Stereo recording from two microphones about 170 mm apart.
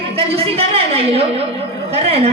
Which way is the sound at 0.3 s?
35° right (ahead or behind).